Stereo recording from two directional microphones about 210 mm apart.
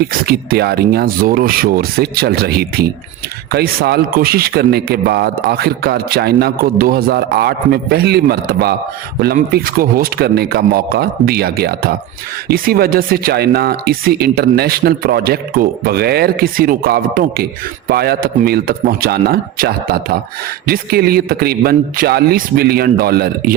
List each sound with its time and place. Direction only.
0.0 s speech: 45° right (ahead or behind)